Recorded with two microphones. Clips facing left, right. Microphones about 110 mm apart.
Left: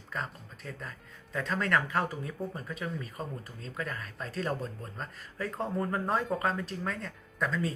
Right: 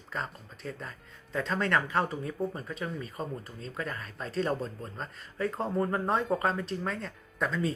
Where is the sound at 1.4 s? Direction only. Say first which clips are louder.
Right 1 dB; 30° right (ahead or behind).